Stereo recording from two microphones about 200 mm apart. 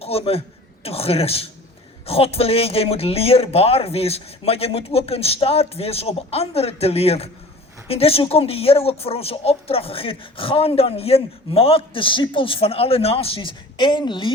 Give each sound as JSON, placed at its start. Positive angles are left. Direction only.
{"t": 0.0, "sound": "a man's voice", "side_deg": 30}